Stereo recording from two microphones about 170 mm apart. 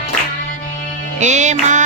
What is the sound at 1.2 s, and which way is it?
Music, 45° right (ahead or behind).